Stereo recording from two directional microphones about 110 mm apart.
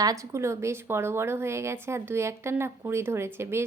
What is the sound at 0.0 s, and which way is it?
Speech, 30° right (ahead or behind).